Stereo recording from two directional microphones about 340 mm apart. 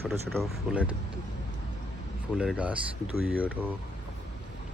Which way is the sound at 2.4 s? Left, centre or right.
Centre.